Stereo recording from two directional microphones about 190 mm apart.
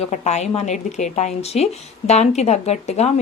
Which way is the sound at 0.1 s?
35° left (ahead or behind).